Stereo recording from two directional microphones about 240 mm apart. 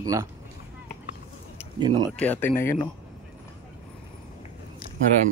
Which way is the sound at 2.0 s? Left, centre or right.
Centre.